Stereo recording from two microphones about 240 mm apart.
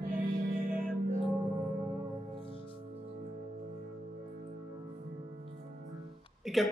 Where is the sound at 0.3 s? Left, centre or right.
Right.